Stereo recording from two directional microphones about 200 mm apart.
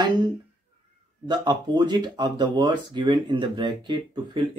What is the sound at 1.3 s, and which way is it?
Speech, 20° right (ahead or behind).